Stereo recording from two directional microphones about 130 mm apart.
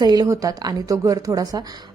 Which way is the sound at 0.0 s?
30° right (ahead or behind).